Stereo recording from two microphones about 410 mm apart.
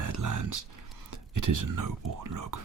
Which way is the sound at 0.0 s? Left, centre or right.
Right.